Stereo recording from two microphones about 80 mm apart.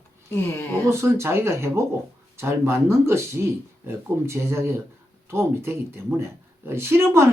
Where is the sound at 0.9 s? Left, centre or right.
Right.